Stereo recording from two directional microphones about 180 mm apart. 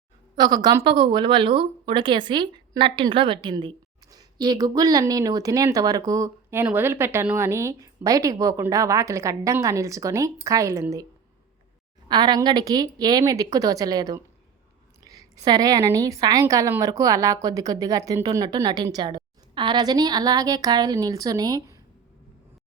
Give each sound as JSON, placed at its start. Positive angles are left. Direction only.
{"t": 0.3, "sound": "a woman's voice", "side_deg": -25}
{"t": 12.0, "sound": "a woman's voice", "side_deg": -25}